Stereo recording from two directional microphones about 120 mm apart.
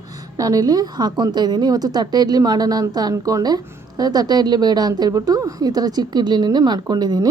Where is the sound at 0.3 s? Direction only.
30° right (ahead or behind).